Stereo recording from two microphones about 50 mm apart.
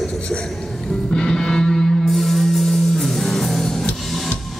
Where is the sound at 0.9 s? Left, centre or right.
Centre.